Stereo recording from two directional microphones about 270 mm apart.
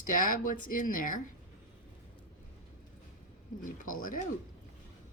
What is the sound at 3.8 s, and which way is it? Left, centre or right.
Speech, left.